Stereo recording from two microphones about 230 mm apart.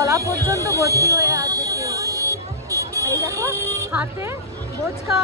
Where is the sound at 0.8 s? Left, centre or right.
Centre.